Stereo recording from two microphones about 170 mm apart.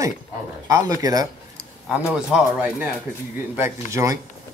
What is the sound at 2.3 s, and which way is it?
Speech, 5° right (ahead or behind).